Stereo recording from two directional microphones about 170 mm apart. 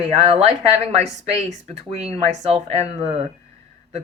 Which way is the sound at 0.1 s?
40° right (ahead or behind).